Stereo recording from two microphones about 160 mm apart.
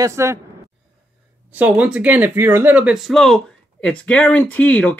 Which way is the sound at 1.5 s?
5° right (ahead or behind).